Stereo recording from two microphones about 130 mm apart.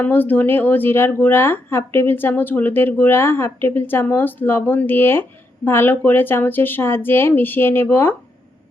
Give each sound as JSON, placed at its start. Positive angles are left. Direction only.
{"t": 0.0, "sound": "speech", "side_deg": 15}